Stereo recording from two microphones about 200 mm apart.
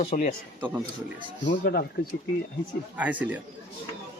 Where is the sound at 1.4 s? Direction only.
50° left (ahead or behind).